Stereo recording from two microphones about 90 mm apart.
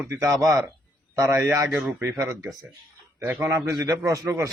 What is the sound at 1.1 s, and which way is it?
Speech, 35° right (ahead or behind).